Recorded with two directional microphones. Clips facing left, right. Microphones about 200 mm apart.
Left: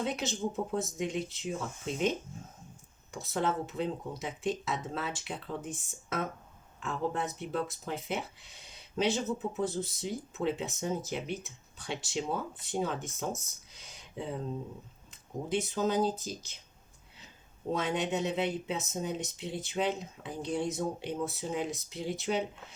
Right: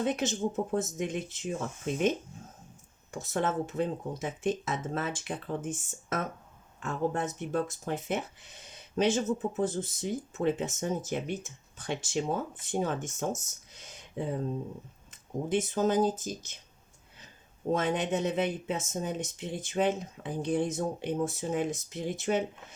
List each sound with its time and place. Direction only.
0.0 s speech: 45° right (ahead or behind)
3.1 s speech: 45° right (ahead or behind)
15.1 s speech: 50° right (ahead or behind)
17.7 s speech: 50° right (ahead or behind)